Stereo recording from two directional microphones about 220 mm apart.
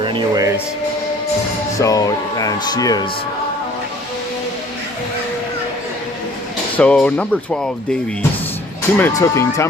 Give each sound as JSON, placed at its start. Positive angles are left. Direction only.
{"t": 0.0, "sound": "speech", "side_deg": -20}
{"t": 1.8, "sound": "speech", "side_deg": 15}
{"t": 6.7, "sound": "speech", "side_deg": 5}
{"t": 9.0, "sound": "speech", "side_deg": 10}